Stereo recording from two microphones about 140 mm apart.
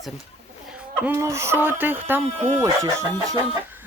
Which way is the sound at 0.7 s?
5° right (ahead or behind).